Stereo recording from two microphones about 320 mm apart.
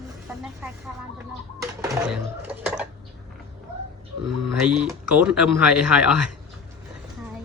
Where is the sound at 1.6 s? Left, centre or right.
Centre.